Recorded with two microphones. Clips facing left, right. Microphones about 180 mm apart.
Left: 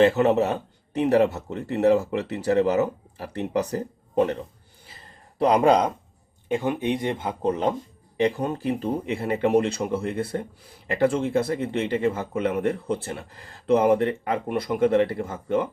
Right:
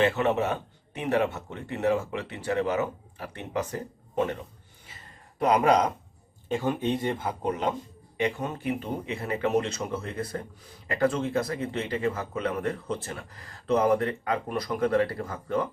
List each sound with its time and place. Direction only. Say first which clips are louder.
0.0 s a man's voice: left 6 dB; 40° left (ahead or behind); by 7.3 s 20° left (ahead or behind)
7.4 s a man's voice: left 5 dB; 35° left (ahead or behind)